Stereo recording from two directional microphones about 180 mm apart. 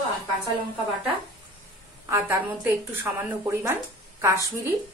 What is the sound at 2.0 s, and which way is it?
A woman's voice, 15° right (ahead or behind).